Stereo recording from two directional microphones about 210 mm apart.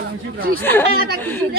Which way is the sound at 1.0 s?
50° right (ahead or behind).